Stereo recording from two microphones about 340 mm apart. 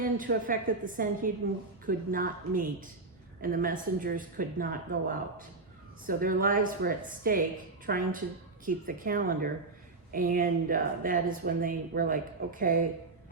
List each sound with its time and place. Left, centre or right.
0.0 s speech: right
6.1 s speech: right